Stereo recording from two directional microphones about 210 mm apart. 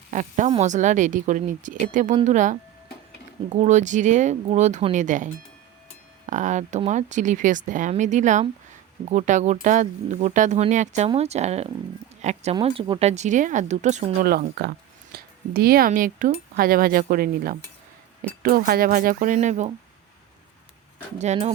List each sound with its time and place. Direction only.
0.1 s speech: 35° right (ahead or behind)
21.2 s speech: 30° right (ahead or behind)